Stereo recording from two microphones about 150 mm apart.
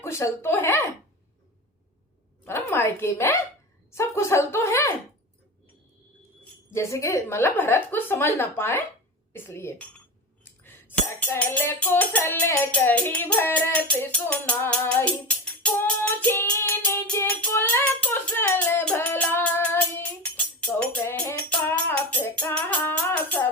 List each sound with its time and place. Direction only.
0.0 s speech: 20° left (ahead or behind)
2.4 s music: 15° left (ahead or behind)
3.9 s a woman's voice: 20° left (ahead or behind)
6.7 s music: 20° left (ahead or behind)